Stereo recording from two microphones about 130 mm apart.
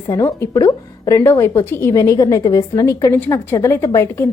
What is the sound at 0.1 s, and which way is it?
A woman's voice, 25° left (ahead or behind).